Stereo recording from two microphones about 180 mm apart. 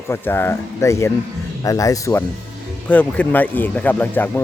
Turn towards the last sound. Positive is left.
turn(degrees=10)  # may be behind; listen again after turning